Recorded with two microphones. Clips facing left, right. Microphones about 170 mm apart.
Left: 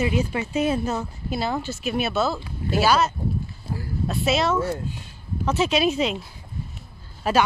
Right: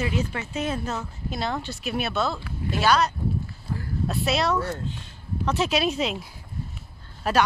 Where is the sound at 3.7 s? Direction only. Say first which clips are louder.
Left 1 dB; 25° left (ahead or behind).